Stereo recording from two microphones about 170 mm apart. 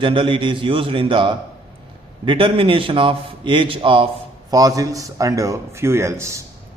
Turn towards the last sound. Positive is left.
turn(degrees=-15)  # may be behind; listen again after turning